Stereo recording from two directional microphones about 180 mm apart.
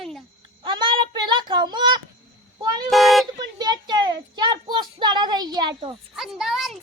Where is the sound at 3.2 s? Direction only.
25° right (ahead or behind).